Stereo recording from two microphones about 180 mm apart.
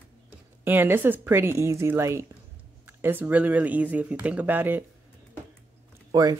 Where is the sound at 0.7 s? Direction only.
10° right (ahead or behind).